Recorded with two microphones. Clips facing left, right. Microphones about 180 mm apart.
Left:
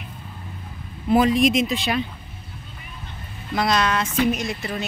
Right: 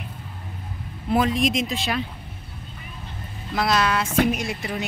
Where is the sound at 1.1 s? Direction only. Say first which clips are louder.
Left 4 dB; centre (ahead or behind).